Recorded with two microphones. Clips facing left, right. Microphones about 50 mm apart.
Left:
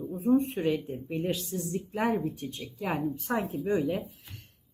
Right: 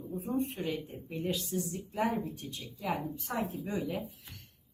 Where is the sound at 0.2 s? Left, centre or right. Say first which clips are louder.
Left 9 dB; left.